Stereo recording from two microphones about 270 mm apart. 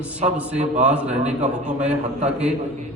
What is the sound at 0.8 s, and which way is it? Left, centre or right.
Speech, centre.